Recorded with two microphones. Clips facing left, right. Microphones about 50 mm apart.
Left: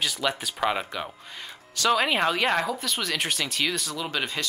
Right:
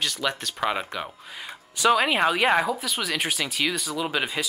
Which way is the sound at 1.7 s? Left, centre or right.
Centre.